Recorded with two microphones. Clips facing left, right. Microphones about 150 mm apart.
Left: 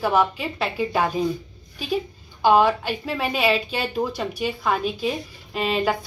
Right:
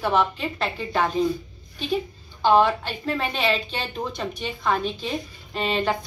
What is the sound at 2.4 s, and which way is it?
A woman's voice, 10° left (ahead or behind).